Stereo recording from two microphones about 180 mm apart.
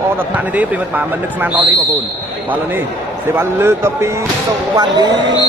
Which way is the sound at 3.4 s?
15° right (ahead or behind).